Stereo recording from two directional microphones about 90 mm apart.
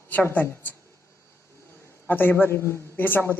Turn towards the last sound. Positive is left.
turn(degrees=25)  # may be behind; listen again after turning